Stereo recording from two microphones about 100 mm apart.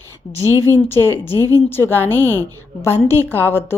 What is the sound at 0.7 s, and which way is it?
A woman's voice, 25° left (ahead or behind).